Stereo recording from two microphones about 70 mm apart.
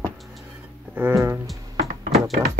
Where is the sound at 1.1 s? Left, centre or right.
Right.